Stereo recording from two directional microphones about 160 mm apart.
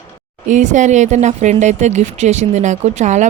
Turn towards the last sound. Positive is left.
turn(degrees=-50)  # may be behind; listen again after turning